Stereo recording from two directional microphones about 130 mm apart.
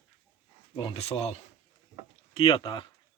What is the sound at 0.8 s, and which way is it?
Speech, 45° left (ahead or behind).